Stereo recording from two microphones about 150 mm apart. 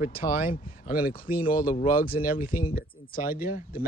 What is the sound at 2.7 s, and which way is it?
Speech, 75° left (ahead or behind).